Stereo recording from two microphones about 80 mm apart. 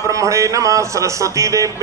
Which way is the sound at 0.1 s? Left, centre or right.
Right.